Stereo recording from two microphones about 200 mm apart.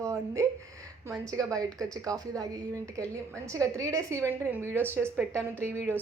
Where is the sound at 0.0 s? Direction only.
15° right (ahead or behind).